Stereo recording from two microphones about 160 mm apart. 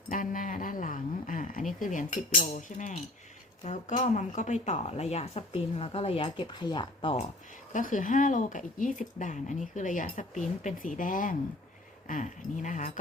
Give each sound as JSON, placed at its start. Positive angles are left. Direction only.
{"t": 0.1, "sound": "a sound", "side_deg": 55}
{"t": 3.6, "sound": "speech", "side_deg": 50}
{"t": 7.7, "sound": "speech", "side_deg": 55}